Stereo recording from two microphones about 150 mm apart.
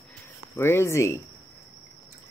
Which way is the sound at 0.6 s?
15° left (ahead or behind).